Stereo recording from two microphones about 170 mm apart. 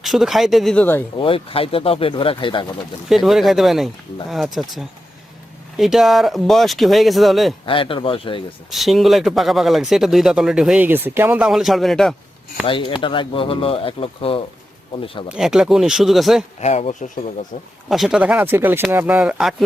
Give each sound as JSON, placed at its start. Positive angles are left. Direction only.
{"t": 0.0, "sound": "speech", "side_deg": 0}
{"t": 1.2, "sound": "speech", "side_deg": 30}
{"t": 3.1, "sound": "speech", "side_deg": 0}
{"t": 5.7, "sound": "speech", "side_deg": 0}
{"t": 7.6, "sound": "speech", "side_deg": 30}
{"t": 8.7, "sound": "speech", "side_deg": 0}
{"t": 12.6, "sound": "speech", "side_deg": 30}
{"t": 15.4, "sound": "speech", "side_deg": -5}
{"t": 16.6, "sound": "speech", "side_deg": 40}
{"t": 17.8, "sound": "speech", "side_deg": 0}